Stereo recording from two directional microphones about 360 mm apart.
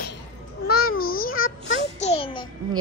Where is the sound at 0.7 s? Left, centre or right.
Left.